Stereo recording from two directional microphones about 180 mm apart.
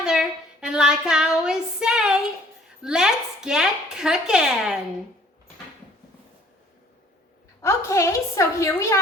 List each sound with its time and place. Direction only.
0.0 s a sound: 5° right (ahead or behind)
2.8 s speech: 5° right (ahead or behind)
7.6 s a woman's voice: 15° left (ahead or behind)